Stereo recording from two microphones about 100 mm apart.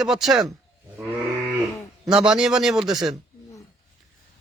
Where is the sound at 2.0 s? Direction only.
5° right (ahead or behind).